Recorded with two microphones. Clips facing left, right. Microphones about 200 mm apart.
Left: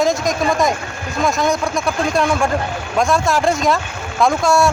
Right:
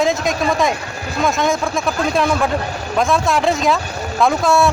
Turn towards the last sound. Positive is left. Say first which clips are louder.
# even
turn(degrees=0)  # may be behind; listen again after turning